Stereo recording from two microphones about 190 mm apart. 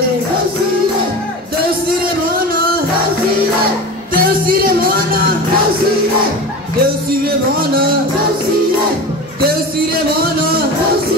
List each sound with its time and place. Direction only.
4.1 s speech: 50° right (ahead or behind)
6.8 s music: 50° right (ahead or behind)